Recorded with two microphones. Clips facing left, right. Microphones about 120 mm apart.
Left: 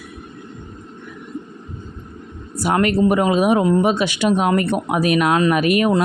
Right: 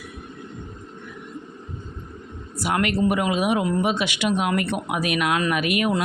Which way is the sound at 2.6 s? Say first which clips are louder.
Left 5 dB; 40° left (ahead or behind).